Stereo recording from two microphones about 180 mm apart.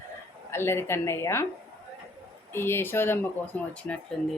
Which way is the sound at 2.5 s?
15° left (ahead or behind).